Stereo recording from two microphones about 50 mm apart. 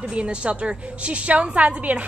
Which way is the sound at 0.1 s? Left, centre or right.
Right.